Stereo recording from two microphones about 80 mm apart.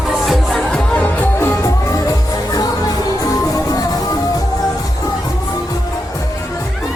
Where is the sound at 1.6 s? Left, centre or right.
Left.